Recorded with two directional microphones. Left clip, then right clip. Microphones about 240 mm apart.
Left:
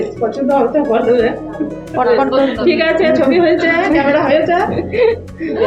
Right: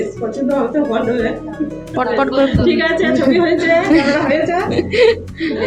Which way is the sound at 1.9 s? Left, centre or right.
Centre.